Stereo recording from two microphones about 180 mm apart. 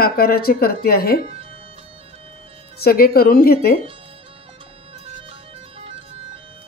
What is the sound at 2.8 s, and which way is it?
Speech, 55° left (ahead or behind).